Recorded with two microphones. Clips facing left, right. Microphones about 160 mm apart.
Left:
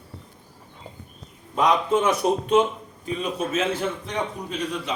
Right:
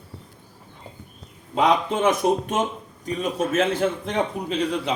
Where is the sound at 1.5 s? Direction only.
55° right (ahead or behind).